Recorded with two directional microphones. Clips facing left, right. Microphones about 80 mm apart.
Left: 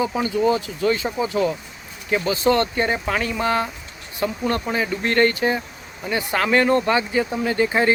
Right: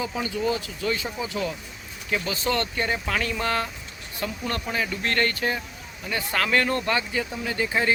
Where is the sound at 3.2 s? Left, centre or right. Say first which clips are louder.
Left 4 dB; centre.